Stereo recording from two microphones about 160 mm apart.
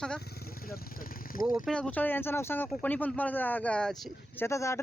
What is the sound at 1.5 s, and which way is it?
Speech, 5° left (ahead or behind).